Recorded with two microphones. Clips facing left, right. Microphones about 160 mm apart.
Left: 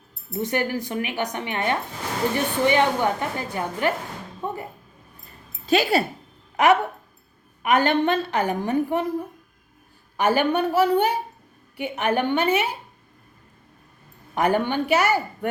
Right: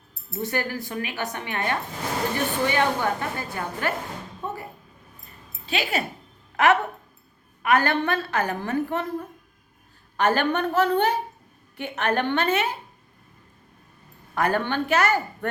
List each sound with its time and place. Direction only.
0.4 s a woman's voice: 20° left (ahead or behind)
4.4 s a sound: 15° left (ahead or behind)
5.6 s speech: 40° left (ahead or behind)
7.6 s a woman's voice: 20° left (ahead or behind)
10.2 s a woman's voice: 10° left (ahead or behind)
14.3 s a woman's voice: 15° left (ahead or behind)